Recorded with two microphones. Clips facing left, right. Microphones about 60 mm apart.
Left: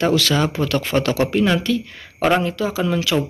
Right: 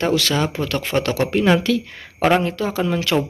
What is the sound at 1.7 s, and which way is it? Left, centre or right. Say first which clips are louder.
Speech: right 1 dB; right.